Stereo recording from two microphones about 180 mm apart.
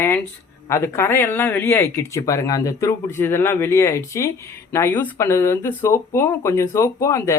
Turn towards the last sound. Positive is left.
turn(degrees=15)  # may be behind; listen again after turning